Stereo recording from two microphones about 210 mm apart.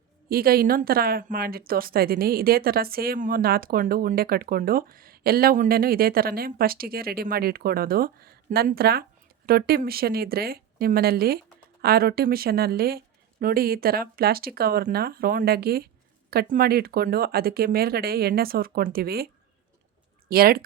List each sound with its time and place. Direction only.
0.3 s speech: 45° right (ahead or behind)
20.3 s speech: 45° right (ahead or behind)